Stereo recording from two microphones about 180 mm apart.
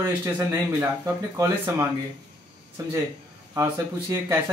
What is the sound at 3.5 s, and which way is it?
Speech, 15° right (ahead or behind).